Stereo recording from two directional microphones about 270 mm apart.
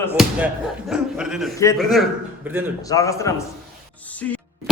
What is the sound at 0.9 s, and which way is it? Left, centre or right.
A man's voice, centre.